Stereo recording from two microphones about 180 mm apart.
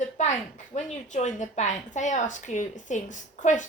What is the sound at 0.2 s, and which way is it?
A woman's voice, 40° left (ahead or behind).